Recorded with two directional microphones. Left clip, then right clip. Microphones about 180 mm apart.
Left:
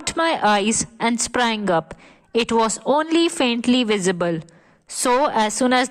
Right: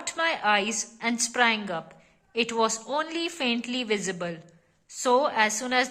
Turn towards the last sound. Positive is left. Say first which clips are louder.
# left 6 dB
turn(degrees=45)  # may be behind; listen again after turning